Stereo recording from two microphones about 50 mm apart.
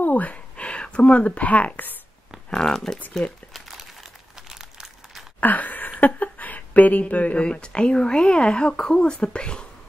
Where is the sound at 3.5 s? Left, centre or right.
Centre.